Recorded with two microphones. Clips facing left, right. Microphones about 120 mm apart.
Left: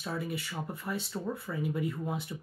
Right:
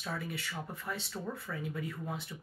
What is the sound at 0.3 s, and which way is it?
Speech, 10° left (ahead or behind).